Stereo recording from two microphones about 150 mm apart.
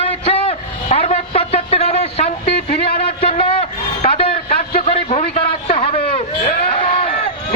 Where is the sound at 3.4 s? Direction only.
40° left (ahead or behind).